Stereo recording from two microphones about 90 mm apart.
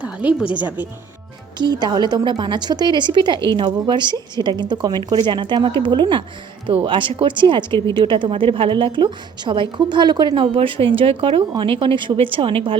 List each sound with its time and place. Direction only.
0.0 s a sound: 15° right (ahead or behind)
0.5 s speech: 20° right (ahead or behind)
1.5 s a woman's voice: 50° right (ahead or behind)
10.3 s a woman's voice: 80° right